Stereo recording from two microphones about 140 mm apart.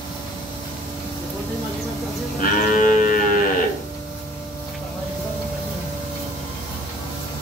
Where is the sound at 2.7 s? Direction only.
65° left (ahead or behind).